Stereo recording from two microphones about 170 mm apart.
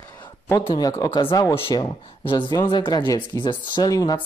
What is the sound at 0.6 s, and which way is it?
A man's voice, 25° left (ahead or behind).